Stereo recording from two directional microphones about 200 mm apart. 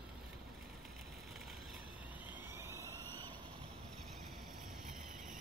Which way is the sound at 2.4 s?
15° right (ahead or behind).